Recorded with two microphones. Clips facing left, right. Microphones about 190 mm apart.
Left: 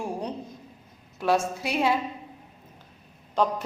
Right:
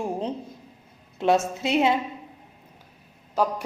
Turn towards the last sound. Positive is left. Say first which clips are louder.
# even
turn(degrees=-10)  # may be behind; listen again after turning